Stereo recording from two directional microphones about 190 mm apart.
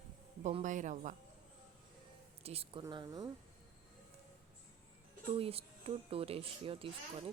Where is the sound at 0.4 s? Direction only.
40° right (ahead or behind).